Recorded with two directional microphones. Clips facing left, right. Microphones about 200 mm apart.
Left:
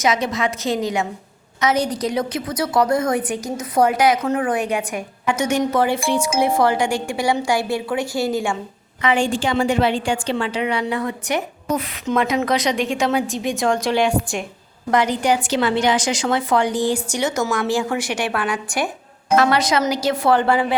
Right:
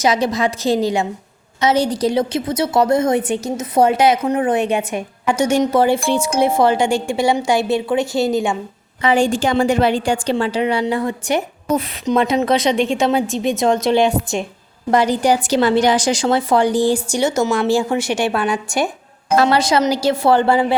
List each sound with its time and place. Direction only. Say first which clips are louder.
0.0 s a woman's voice: right 3 dB; 35° right (ahead or behind)
9.0 s a woman's voice: right 4 dB; 35° right (ahead or behind)
12.1 s a woman's voice: right 3 dB; 20° right (ahead or behind)